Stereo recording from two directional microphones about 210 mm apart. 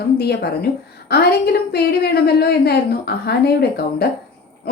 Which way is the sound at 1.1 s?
50° left (ahead or behind).